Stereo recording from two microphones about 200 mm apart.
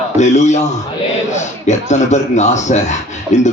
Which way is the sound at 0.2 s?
35° left (ahead or behind).